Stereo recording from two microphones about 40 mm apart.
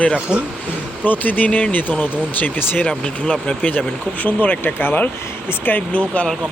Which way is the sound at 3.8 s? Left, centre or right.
Left.